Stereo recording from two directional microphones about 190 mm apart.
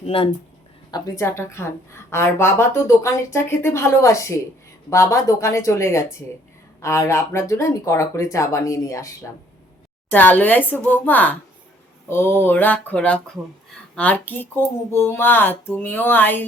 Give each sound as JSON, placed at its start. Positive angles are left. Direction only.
{"t": 0.0, "sound": "speech", "side_deg": 30}